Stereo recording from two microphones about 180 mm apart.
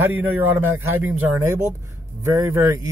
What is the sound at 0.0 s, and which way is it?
Speech, 10° right (ahead or behind).